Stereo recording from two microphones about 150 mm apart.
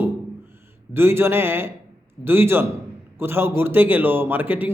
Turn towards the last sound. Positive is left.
turn(degrees=-10)  # may be behind; listen again after turning